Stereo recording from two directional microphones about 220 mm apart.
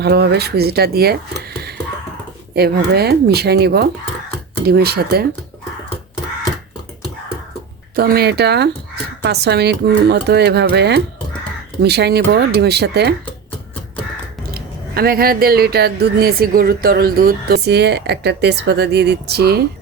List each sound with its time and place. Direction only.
0.0 s speech: 50° right (ahead or behind)
7.9 s speech: 45° right (ahead or behind)
14.5 s speech: 45° right (ahead or behind)